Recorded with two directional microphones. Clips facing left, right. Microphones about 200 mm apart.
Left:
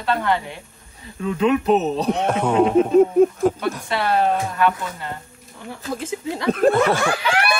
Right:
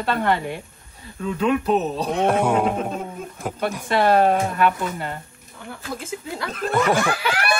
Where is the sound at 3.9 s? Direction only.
50° right (ahead or behind).